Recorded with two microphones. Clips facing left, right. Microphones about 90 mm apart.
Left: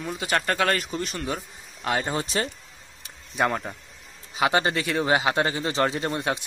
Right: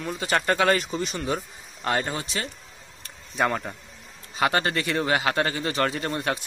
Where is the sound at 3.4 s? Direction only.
Centre (ahead or behind).